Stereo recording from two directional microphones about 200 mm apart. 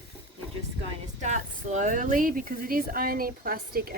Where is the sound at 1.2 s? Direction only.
35° right (ahead or behind).